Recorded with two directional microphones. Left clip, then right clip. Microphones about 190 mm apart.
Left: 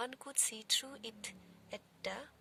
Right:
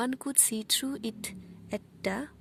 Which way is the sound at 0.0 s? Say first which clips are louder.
Right 9 dB; 40° right (ahead or behind).